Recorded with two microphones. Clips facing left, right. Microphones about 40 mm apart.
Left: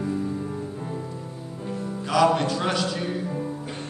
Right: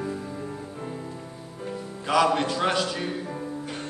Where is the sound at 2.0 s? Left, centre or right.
Centre.